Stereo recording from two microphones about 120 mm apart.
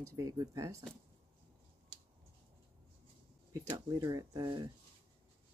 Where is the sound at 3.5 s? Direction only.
30° right (ahead or behind).